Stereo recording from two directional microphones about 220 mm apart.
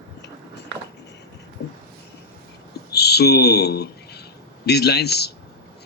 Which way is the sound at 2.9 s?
50° left (ahead or behind).